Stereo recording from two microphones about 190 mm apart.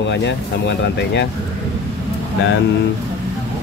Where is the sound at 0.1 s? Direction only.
65° left (ahead or behind).